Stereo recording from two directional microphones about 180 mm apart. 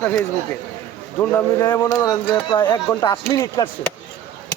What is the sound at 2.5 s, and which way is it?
Speech, 25° left (ahead or behind).